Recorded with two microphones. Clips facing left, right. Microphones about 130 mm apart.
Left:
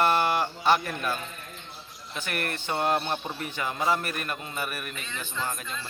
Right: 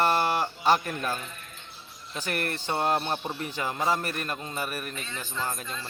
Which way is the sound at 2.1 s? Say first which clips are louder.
Right 1 dB; 35° right (ahead or behind).